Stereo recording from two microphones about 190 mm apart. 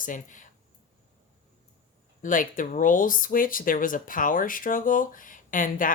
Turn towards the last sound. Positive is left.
turn(degrees=45)  # may be behind; listen again after turning